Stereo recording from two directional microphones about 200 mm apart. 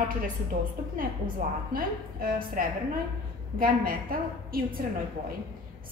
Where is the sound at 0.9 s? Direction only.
45° right (ahead or behind).